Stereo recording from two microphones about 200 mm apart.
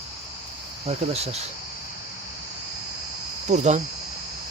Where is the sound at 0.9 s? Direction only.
30° right (ahead or behind).